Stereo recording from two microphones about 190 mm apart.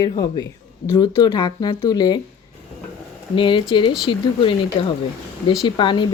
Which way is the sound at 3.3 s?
25° left (ahead or behind).